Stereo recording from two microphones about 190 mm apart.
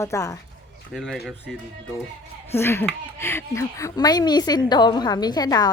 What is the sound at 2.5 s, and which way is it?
A woman's voice, 10° left (ahead or behind).